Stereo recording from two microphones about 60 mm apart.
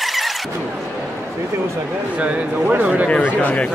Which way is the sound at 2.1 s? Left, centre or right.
Right.